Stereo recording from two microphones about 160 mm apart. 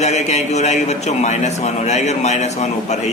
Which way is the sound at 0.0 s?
45° left (ahead or behind).